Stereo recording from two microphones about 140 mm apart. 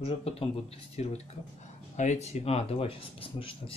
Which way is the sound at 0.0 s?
45° left (ahead or behind).